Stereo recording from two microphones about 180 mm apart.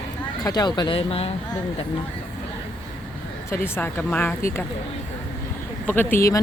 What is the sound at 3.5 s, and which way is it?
Speech, 15° left (ahead or behind).